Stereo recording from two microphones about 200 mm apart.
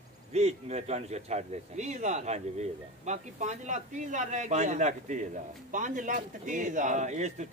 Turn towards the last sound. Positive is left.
turn(degrees=-35)  # may be behind; listen again after turning